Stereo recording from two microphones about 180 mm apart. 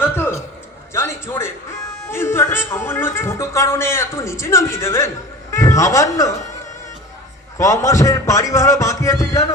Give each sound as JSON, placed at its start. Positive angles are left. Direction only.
{"t": 0.0, "sound": "a sound", "side_deg": 10}
{"t": 2.0, "sound": "speech", "side_deg": 15}
{"t": 7.6, "sound": "speech", "side_deg": 15}